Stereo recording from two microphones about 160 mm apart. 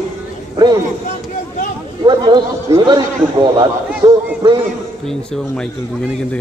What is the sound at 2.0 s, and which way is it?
Speech, 30° right (ahead or behind).